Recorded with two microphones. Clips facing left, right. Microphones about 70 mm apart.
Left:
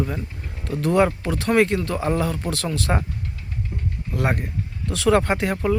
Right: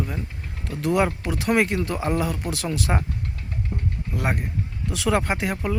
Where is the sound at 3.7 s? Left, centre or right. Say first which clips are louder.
Right 2 dB; right.